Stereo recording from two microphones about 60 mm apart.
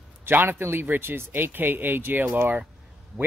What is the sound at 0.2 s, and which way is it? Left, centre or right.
Speech, right.